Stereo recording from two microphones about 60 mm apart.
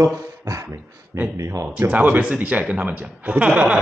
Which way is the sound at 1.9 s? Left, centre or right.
Right.